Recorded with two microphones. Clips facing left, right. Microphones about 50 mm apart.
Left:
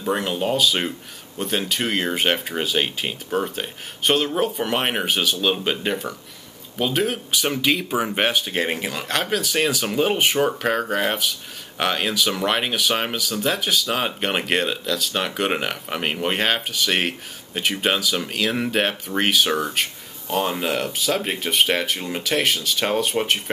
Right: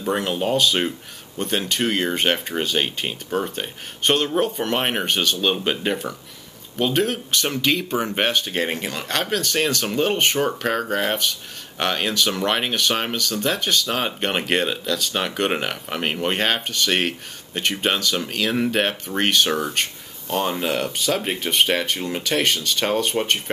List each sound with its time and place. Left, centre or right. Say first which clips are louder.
0.0 s speech: even; centre